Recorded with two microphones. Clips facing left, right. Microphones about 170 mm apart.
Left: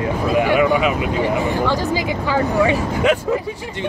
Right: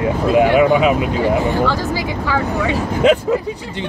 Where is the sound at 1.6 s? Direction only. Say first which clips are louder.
Even; 15° left (ahead or behind).